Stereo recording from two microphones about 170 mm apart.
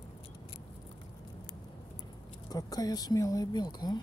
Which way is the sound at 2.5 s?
20° left (ahead or behind).